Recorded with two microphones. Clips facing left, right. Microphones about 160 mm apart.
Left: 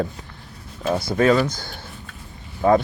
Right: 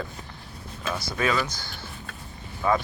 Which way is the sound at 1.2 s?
35° left (ahead or behind).